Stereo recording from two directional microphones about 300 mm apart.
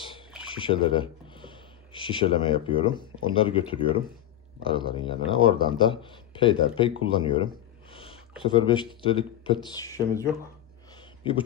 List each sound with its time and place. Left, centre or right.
0.4 s speech: centre
7.9 s a sound: centre
8.4 s speech: centre